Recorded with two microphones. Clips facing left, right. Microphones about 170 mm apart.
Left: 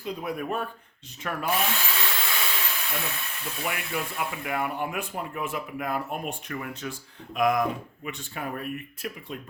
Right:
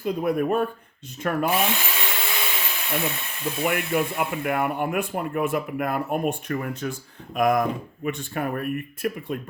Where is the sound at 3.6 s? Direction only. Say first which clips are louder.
Right 8 dB; 55° right (ahead or behind).